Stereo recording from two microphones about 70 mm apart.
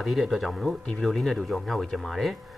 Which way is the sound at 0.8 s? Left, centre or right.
Centre.